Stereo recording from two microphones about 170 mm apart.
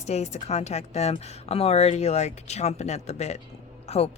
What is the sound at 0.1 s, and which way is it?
A woman's voice, 40° left (ahead or behind).